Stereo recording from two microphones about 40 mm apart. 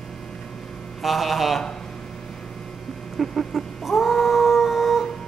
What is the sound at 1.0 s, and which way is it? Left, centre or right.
Speech, centre.